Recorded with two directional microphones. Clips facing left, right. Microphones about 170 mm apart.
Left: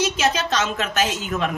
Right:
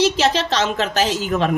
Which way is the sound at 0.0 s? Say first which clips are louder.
Right 4 dB; 30° right (ahead or behind).